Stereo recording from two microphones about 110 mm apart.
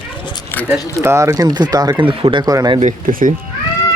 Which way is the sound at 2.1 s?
50° right (ahead or behind).